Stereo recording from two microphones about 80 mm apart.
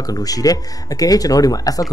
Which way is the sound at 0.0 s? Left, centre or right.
Left.